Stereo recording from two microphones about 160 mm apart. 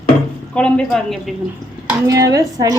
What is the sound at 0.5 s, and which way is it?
Speech, 5° left (ahead or behind).